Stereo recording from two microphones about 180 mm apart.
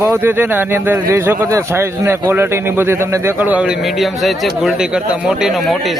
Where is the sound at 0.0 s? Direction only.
15° right (ahead or behind).